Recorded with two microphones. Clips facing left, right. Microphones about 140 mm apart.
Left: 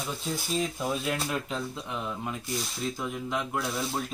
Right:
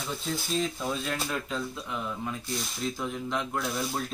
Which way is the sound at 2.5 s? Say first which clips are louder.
Left 1 dB; 5° left (ahead or behind).